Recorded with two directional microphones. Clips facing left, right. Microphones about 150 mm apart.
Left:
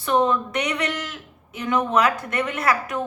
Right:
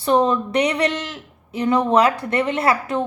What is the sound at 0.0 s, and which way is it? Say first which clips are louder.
A woman's voice: right 3 dB; 35° right (ahead or behind).